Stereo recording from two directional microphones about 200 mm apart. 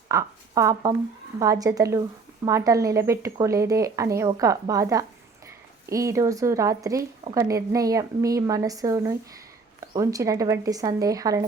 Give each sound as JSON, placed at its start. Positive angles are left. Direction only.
{"t": 0.1, "sound": "a woman's voice", "side_deg": -15}